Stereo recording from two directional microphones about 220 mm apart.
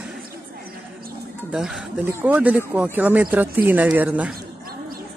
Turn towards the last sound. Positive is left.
turn(degrees=-5)  # may be behind; listen again after turning